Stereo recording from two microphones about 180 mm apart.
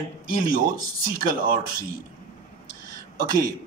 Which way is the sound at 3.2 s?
55° right (ahead or behind).